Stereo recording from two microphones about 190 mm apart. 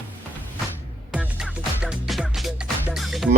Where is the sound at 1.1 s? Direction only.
5° right (ahead or behind).